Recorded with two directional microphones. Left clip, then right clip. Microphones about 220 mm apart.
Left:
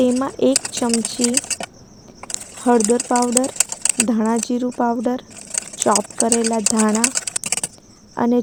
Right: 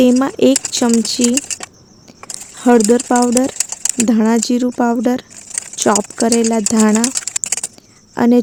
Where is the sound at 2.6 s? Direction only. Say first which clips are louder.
Right 5 dB; 40° right (ahead or behind).